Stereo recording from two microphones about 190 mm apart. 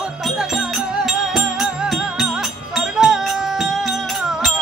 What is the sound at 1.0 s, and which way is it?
Music, centre (ahead or behind).